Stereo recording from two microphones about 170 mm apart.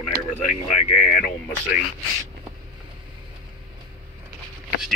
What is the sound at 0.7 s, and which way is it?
Speech, 45° left (ahead or behind).